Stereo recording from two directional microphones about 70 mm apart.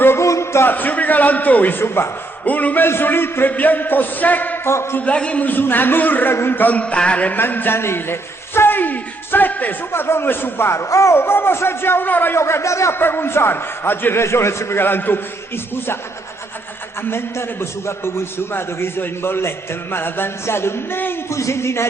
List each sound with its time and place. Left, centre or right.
0.0 s music: left
0.7 s a man's voice: left
2.4 s a man's voice: left
4.9 s a man's voice: centre
7.3 s a man's voice: left
9.9 s a man's voice: left
12.4 s a man's voice: left
13.0 s a man's voice: left
17.0 s a man's voice: left
21.3 s a man's voice: left